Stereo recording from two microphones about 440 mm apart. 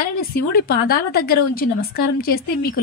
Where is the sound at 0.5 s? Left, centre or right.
Left.